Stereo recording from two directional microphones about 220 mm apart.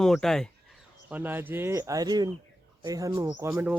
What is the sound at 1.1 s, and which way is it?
Speech, 10° right (ahead or behind).